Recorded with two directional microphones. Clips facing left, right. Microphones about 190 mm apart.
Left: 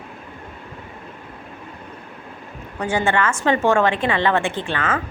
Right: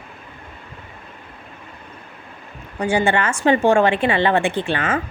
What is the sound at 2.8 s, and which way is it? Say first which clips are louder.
A woman's voice: right 2 dB; 10° right (ahead or behind).